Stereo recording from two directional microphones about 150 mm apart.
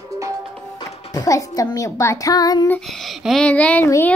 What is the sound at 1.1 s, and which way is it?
Speech, 20° left (ahead or behind).